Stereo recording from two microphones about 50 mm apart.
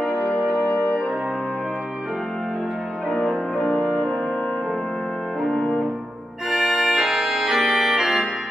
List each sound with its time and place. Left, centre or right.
0.1 s music: left
3.6 s music: left
6.5 s organ: centre